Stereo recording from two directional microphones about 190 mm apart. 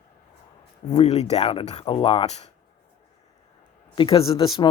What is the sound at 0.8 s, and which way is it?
Speech, 35° left (ahead or behind).